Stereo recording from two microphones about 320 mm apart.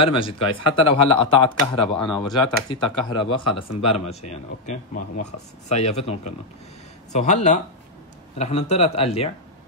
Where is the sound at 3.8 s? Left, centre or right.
Left.